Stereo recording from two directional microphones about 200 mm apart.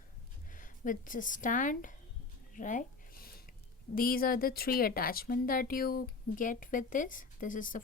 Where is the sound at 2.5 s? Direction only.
40° left (ahead or behind).